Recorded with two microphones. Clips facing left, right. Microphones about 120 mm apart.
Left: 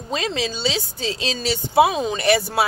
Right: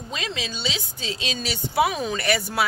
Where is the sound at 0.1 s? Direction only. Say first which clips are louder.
Left 8 dB; 40° left (ahead or behind).